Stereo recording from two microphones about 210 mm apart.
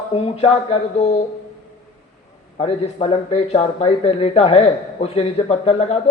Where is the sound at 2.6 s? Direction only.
30° left (ahead or behind).